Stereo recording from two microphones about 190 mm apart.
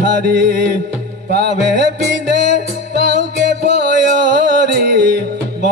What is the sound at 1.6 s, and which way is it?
Music, 65° right (ahead or behind).